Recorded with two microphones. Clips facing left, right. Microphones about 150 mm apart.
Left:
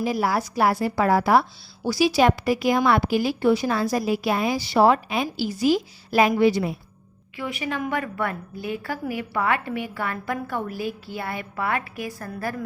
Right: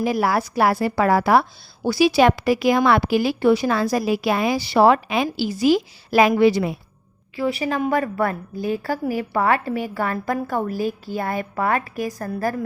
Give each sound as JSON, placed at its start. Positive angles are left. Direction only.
{"t": 0.0, "sound": "a woman's voice", "side_deg": -70}
{"t": 7.3, "sound": "a woman's voice", "side_deg": -35}